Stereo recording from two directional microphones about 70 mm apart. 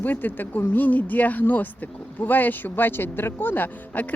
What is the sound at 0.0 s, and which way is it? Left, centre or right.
Speech, left.